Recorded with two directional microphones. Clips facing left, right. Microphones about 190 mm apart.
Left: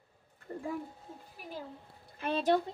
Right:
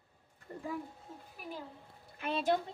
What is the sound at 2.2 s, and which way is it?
Speech, 35° left (ahead or behind).